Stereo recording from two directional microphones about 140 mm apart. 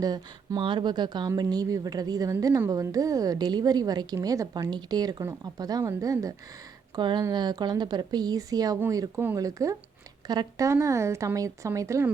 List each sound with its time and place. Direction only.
0.0 s speech: 30° right (ahead or behind)